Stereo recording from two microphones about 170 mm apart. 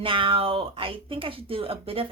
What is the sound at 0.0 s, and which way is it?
A woman's voice, 30° right (ahead or behind).